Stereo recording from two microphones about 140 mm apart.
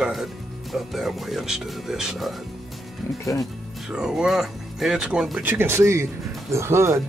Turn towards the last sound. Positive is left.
turn(degrees=-20)  # may be behind; listen again after turning